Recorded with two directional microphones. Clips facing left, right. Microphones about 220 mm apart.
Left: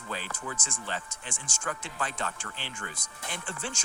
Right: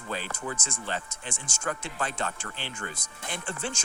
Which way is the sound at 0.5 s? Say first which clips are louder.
Right 3 dB; 25° right (ahead or behind).